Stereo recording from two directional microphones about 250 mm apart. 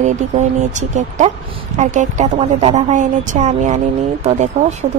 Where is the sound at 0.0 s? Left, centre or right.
Right.